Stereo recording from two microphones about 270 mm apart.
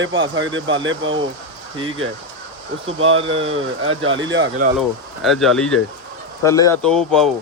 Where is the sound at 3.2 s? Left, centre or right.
Centre.